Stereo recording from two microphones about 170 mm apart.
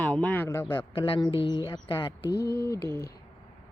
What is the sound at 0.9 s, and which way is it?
Speech, 30° left (ahead or behind).